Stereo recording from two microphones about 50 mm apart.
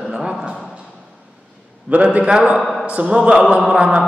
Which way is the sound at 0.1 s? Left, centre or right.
Centre.